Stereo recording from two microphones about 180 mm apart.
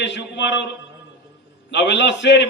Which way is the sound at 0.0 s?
80° left.